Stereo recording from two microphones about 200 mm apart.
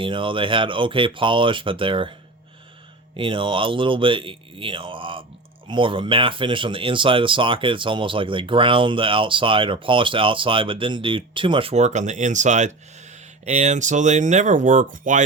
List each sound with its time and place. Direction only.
0.0 s speech: 25° right (ahead or behind)
3.2 s speech: 25° right (ahead or behind); by 15.2 s 40° right (ahead or behind)